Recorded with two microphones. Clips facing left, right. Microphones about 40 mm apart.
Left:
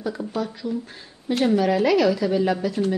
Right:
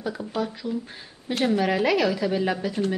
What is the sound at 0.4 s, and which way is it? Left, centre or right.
A woman's voice, centre.